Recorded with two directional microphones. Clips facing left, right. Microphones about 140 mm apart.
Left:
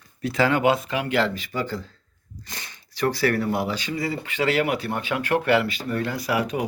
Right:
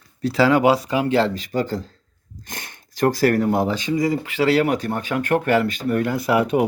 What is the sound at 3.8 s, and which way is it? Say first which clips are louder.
Speech: right 7 dB; 20° right (ahead or behind).